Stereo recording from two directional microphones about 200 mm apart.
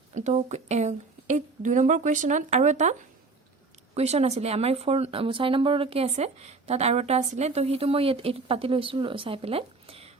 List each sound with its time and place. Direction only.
0.1 s speech: 35° right (ahead or behind)
3.9 s speech: 30° right (ahead or behind)